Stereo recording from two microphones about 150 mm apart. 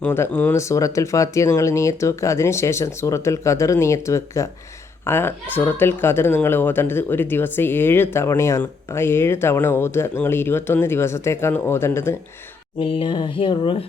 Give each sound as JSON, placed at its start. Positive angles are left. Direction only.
{"t": 0.0, "sound": "speech", "side_deg": 15}
{"t": 12.8, "sound": "speech", "side_deg": 35}